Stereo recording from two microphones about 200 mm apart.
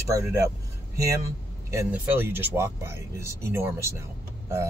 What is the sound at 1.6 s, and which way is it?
Speech, 10° right (ahead or behind).